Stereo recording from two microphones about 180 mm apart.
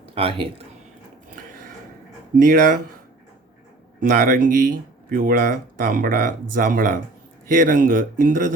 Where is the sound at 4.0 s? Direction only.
50° right (ahead or behind).